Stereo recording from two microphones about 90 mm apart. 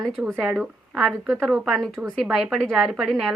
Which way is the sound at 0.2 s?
15° right (ahead or behind).